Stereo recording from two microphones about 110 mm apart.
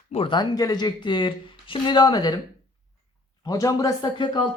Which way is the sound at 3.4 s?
30° left (ahead or behind).